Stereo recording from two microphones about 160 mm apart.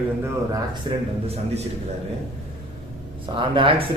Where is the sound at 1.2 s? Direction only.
40° right (ahead or behind).